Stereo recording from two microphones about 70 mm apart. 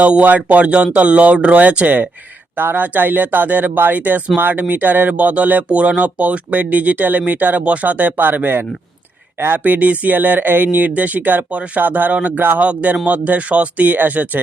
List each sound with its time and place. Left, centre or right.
0.0 s speech: right